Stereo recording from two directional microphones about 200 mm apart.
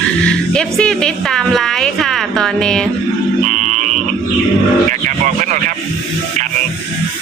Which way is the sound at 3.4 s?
35° right (ahead or behind).